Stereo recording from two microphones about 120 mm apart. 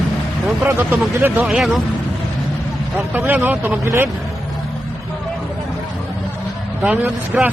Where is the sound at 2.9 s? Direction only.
15° right (ahead or behind).